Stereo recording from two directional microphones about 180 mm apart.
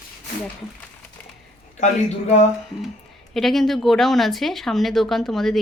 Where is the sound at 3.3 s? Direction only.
Centre (ahead or behind).